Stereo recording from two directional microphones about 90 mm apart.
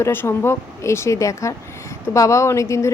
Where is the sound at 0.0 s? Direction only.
25° left (ahead or behind).